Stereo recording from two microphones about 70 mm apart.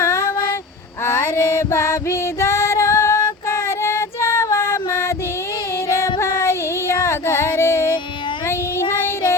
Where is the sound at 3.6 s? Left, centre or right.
Left.